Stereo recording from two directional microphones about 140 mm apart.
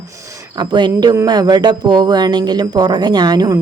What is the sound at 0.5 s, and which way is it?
Speech, 30° right (ahead or behind).